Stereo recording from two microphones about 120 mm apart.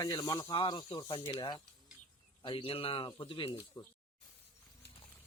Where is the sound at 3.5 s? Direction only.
20° left (ahead or behind).